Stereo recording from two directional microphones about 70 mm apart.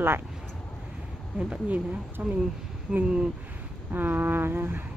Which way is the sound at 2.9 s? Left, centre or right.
Centre.